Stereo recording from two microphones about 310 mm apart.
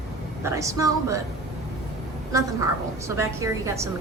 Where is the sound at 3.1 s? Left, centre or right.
Centre.